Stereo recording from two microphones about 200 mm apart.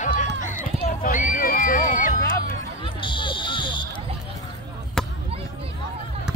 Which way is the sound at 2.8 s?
25° left (ahead or behind).